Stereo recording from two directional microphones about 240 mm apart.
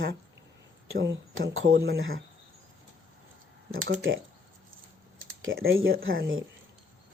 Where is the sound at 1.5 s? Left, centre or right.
Right.